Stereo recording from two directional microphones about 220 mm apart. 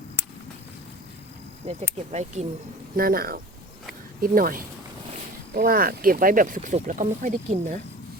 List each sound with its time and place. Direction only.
2.0 s speech: 30° right (ahead or behind)
2.9 s speech: 40° right (ahead or behind)